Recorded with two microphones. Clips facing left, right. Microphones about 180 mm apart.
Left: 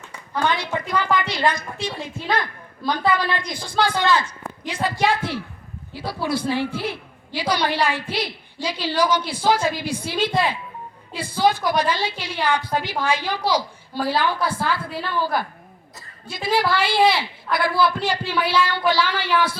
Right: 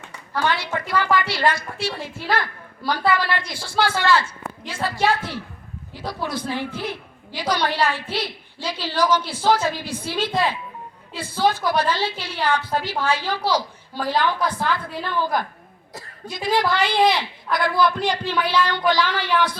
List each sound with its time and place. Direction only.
0.5 s a woman's voice: 20° left (ahead or behind)
2.1 s a woman's voice: 5° right (ahead or behind)
3.1 s a woman's voice: 20° left (ahead or behind)